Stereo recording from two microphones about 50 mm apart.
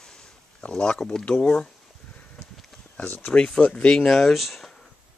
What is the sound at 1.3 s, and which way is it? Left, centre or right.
Speech, left.